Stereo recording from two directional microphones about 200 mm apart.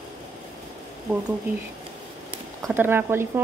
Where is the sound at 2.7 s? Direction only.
10° right (ahead or behind).